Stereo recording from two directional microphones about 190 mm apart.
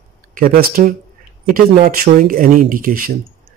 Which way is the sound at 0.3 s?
50° right (ahead or behind).